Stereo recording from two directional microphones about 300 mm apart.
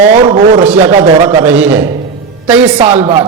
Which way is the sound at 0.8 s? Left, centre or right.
Right.